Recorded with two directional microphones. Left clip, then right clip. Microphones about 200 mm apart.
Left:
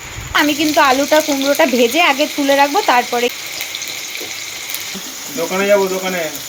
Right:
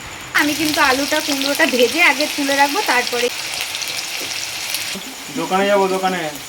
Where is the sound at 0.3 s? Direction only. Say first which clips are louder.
Left 3 dB; 20° left (ahead or behind).